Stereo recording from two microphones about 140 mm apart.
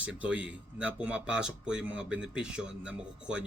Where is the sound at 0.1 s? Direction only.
10° right (ahead or behind).